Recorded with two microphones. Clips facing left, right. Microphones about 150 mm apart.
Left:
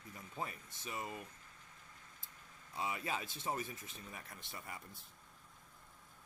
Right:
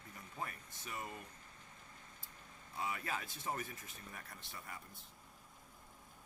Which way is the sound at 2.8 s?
20° left (ahead or behind).